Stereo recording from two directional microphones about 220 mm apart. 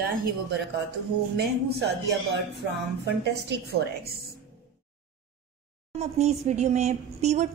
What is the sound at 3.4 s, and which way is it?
Speech, 45° right (ahead or behind).